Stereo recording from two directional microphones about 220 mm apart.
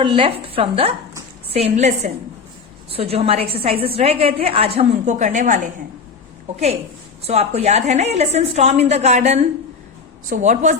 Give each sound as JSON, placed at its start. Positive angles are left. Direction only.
{"t": 0.0, "sound": "a woman's voice", "side_deg": -25}
{"t": 7.2, "sound": "a woman's voice", "side_deg": -30}